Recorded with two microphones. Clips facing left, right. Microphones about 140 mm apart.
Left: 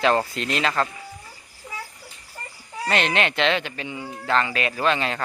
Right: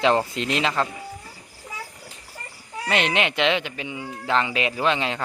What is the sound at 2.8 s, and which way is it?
Speech, 15° right (ahead or behind).